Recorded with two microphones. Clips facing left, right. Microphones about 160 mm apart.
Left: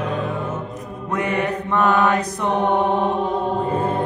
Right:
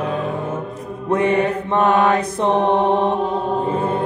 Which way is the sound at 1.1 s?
30° right (ahead or behind).